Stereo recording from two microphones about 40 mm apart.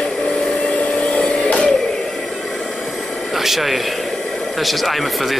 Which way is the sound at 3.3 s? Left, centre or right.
Centre.